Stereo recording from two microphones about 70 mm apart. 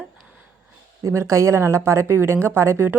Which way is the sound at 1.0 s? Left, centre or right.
Right.